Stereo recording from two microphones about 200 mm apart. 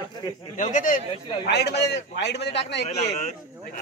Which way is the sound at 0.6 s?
40° left (ahead or behind).